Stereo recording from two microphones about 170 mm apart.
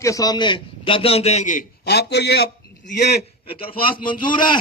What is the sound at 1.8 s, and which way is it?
Speech, 75° left (ahead or behind).